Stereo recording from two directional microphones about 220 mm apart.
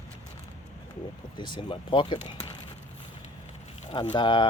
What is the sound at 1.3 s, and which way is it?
Speech, 20° left (ahead or behind).